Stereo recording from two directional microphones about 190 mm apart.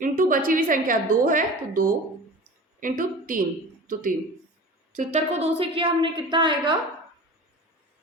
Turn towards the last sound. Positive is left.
turn(degrees=-25)  # may be behind; listen again after turning